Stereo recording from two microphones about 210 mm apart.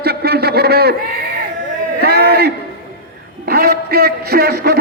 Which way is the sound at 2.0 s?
50° right (ahead or behind).